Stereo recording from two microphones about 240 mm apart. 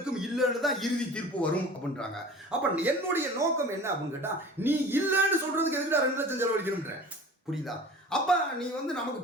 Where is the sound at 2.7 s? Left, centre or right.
Centre.